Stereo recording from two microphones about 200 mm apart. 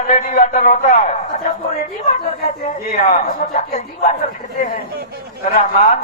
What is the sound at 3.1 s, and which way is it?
Speech, 40° left (ahead or behind).